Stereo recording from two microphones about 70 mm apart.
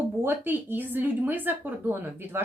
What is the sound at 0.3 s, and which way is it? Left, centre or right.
Speech, right.